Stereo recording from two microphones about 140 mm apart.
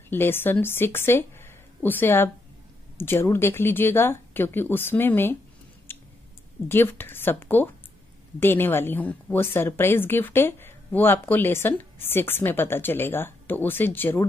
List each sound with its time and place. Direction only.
0.1 s a woman's voice: 15° left (ahead or behind)
5.9 s a sound: 15° left (ahead or behind)
6.7 s a woman's voice: 15° left (ahead or behind)